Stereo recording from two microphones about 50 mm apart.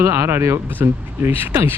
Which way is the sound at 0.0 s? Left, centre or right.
Right.